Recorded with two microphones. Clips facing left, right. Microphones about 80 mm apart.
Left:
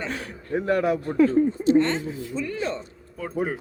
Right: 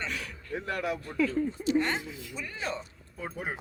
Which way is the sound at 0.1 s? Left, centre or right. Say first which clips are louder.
Left 8 dB; left.